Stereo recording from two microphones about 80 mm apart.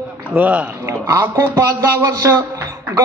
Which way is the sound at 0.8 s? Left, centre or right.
Right.